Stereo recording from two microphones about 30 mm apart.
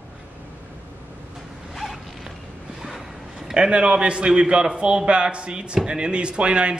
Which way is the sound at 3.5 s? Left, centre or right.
Right.